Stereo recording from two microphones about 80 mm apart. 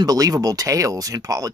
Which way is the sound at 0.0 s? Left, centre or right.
Right.